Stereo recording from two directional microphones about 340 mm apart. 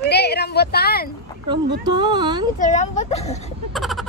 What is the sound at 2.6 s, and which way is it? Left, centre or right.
Speech, left.